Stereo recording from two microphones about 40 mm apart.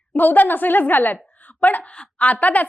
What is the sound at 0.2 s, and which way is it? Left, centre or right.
A woman's voice, left.